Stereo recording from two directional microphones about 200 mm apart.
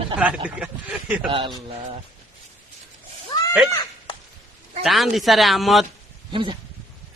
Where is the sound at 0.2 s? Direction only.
5° right (ahead or behind).